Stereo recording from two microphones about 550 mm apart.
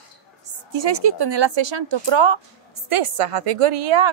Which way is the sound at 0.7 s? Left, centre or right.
Right.